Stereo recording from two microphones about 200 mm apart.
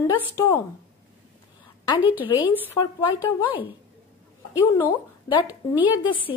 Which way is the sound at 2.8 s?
15° left (ahead or behind).